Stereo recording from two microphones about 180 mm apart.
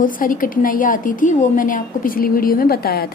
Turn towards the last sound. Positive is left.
turn(degrees=60)  # may be behind; listen again after turning